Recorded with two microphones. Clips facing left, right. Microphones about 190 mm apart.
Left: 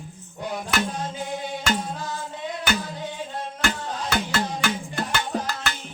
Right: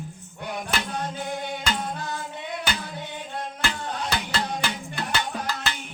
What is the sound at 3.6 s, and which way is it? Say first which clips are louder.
Music: left 3 dB; 45° left (ahead or behind).